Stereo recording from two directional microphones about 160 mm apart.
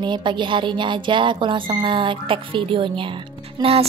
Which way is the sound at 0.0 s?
30° right (ahead or behind).